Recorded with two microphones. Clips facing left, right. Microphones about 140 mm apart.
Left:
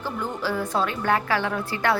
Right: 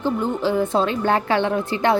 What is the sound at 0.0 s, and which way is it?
A woman's voice, 20° right (ahead or behind).